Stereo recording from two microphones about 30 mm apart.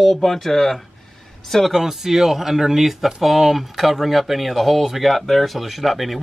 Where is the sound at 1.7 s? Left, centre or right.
Centre.